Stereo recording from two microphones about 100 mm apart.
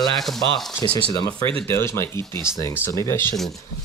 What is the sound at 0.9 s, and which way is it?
Speech, 70° right (ahead or behind).